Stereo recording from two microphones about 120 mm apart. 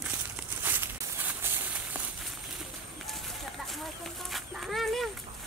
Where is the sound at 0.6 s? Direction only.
15° right (ahead or behind).